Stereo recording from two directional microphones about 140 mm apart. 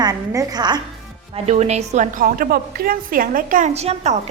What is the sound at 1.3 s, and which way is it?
A woman's voice, 50° right (ahead or behind).